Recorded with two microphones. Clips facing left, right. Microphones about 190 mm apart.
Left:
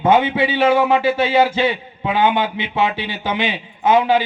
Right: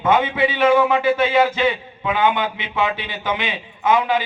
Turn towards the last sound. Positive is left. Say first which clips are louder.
# left 3 dB
turn(degrees=30)  # may be behind; listen again after turning